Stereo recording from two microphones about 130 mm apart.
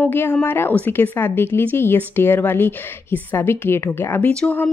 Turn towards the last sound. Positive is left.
turn(degrees=10)  # may be behind; listen again after turning